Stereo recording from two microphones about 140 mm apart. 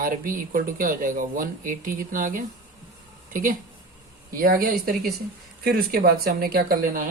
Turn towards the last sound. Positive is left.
turn(degrees=-90)